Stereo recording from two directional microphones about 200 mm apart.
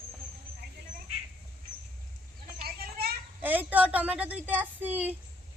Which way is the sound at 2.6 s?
50° right (ahead or behind).